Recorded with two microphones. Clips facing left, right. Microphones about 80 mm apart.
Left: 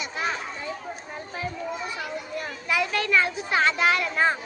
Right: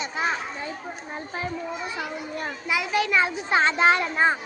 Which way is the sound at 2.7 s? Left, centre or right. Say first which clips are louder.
Even; centre.